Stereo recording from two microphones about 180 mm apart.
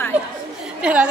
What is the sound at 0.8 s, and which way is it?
Speech, 5° right (ahead or behind).